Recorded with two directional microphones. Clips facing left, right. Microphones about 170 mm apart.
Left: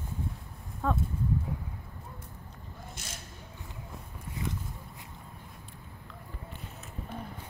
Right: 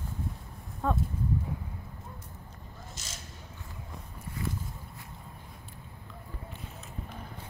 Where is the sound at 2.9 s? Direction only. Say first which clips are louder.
Left 1 dB; 55° left (ahead or behind).